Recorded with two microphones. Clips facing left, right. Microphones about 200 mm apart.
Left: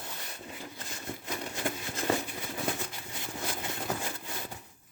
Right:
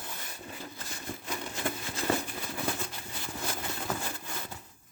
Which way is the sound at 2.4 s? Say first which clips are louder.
Even; 20° left (ahead or behind).